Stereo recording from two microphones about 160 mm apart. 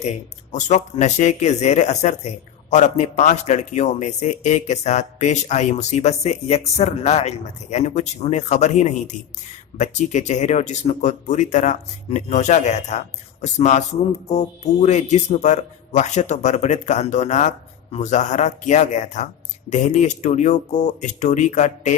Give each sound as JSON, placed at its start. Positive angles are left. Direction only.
{"t": 0.0, "sound": "speech", "side_deg": 45}